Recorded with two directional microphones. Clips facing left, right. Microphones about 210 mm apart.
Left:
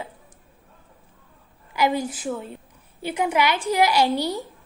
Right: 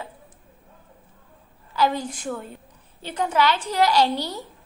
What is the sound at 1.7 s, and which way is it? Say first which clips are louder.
A woman's voice: left 1 dB; 10° left (ahead or behind).